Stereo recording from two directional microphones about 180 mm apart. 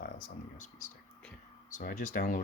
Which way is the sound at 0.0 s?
50° left (ahead or behind).